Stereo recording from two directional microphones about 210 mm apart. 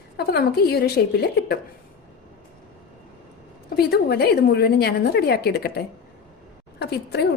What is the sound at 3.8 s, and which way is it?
A woman's voice, 50° left (ahead or behind).